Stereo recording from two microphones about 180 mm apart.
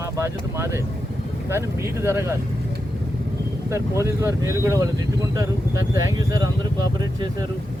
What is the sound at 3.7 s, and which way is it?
Speech, 15° right (ahead or behind).